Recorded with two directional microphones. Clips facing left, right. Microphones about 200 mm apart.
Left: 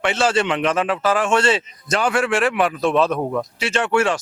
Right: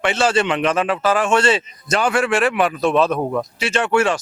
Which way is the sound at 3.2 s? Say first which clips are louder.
Right 1 dB; 25° right (ahead or behind).